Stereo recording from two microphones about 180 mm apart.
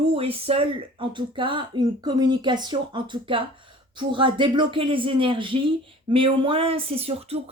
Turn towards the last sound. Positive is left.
turn(degrees=-35)  # may be behind; listen again after turning